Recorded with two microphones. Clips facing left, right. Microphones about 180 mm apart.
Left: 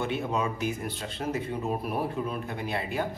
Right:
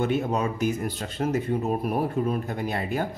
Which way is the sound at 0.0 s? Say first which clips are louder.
Right 4 dB; 45° right (ahead or behind).